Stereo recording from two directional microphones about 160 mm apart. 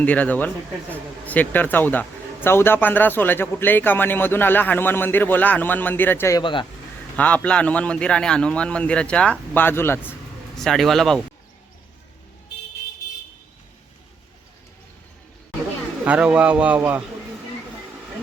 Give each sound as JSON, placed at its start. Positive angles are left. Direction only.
{"t": 0.0, "sound": "speech", "side_deg": 10}
{"t": 6.4, "sound": "speech", "side_deg": 30}
{"t": 7.2, "sound": "speech", "side_deg": 10}
{"t": 10.5, "sound": "a man's voice", "side_deg": 0}
{"t": 16.0, "sound": "speech", "side_deg": -5}